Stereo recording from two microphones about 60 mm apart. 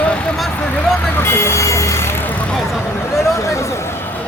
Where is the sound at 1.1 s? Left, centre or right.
Left.